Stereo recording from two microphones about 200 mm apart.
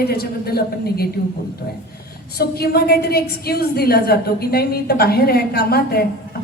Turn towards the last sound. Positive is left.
turn(degrees=50)  # may be behind; listen again after turning